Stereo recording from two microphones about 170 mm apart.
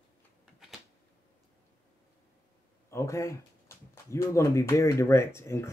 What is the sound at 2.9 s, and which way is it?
Speech, 15° left (ahead or behind).